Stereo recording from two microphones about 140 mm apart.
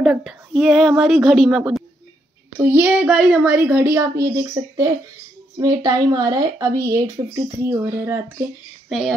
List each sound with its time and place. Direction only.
0.0 s speech: 5° right (ahead or behind)
2.6 s a child's voice: 15° right (ahead or behind)
8.8 s speech: centre (ahead or behind)